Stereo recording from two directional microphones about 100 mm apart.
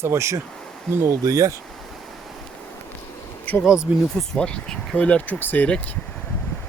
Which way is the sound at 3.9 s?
15° right (ahead or behind).